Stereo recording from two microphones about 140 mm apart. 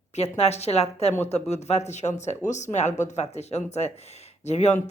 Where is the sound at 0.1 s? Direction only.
50° left (ahead or behind).